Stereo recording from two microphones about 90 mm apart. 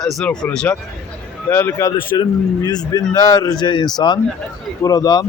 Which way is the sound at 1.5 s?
25° left (ahead or behind).